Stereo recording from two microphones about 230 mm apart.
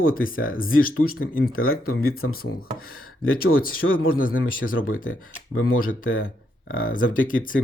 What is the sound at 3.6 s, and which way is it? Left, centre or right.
Speech, left.